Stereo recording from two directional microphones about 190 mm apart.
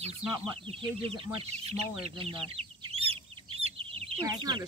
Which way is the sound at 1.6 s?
30° right (ahead or behind).